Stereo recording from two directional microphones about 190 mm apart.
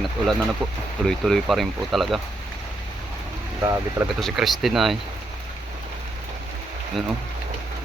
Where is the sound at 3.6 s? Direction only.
15° right (ahead or behind).